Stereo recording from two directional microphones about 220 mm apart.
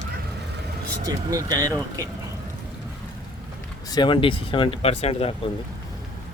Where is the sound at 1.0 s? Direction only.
15° right (ahead or behind).